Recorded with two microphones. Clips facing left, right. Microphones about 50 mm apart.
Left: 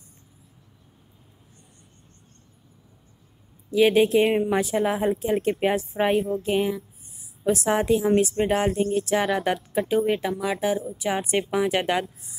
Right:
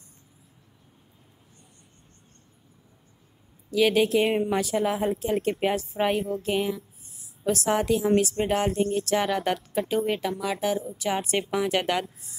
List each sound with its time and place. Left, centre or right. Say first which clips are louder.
3.7 s a woman's voice: left 3 dB; centre